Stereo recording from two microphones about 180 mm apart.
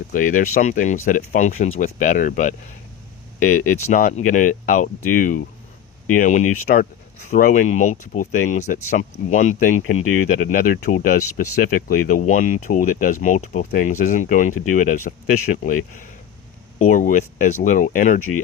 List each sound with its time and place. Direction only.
0.1 s speech: 50° left (ahead or behind)